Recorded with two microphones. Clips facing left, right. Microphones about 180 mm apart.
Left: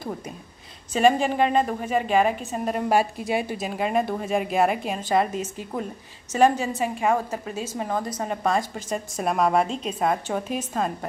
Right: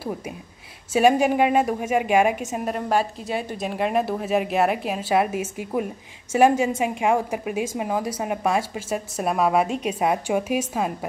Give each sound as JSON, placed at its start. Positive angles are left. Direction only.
{"t": 0.9, "sound": "a woman's voice", "side_deg": -10}
{"t": 2.9, "sound": "a woman's voice", "side_deg": 10}
{"t": 9.7, "sound": "a woman's voice", "side_deg": -70}
{"t": 9.9, "sound": "speech", "side_deg": -10}